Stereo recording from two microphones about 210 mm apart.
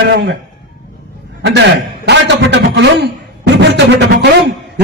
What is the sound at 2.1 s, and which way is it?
A man's voice, 55° right (ahead or behind).